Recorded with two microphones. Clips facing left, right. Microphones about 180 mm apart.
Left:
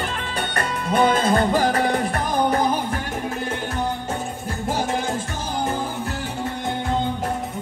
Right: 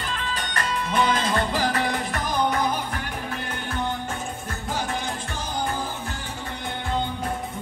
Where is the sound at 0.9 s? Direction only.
40° left (ahead or behind).